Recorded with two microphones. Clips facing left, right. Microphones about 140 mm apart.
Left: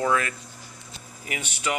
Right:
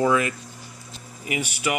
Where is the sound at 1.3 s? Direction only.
10° right (ahead or behind).